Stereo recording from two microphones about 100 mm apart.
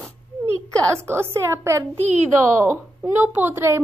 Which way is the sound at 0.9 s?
25° right (ahead or behind).